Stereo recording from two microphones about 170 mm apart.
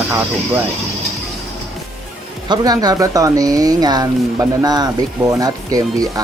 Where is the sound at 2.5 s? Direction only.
25° right (ahead or behind).